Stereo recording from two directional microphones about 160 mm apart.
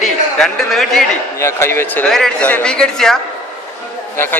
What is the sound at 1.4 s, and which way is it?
Speech, 15° left (ahead or behind).